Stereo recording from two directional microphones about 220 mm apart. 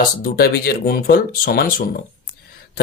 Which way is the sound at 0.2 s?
45° left (ahead or behind).